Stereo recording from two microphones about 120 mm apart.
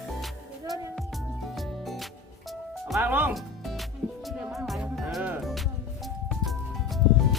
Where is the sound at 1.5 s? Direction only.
Centre (ahead or behind).